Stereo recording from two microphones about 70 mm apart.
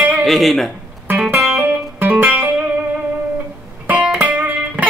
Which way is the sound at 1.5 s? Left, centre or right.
Right.